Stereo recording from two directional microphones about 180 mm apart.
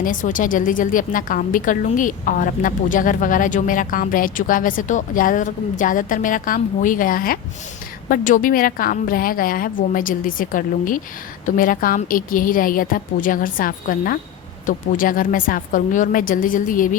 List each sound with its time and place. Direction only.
0.0 s a woman's voice: 45° left (ahead or behind)